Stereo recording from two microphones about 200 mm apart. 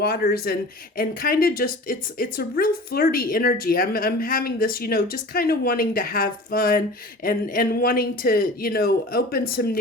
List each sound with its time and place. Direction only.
0.0 s speech: 50° left (ahead or behind)